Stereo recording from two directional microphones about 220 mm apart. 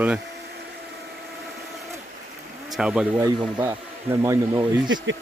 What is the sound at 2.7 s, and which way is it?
Speech, 5° right (ahead or behind).